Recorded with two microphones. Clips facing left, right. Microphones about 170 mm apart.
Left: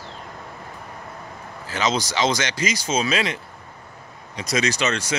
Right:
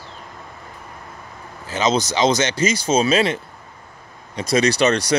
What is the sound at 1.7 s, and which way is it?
Speech, 20° right (ahead or behind).